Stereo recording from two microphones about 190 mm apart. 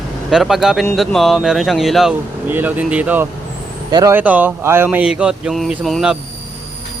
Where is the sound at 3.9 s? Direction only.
20° right (ahead or behind).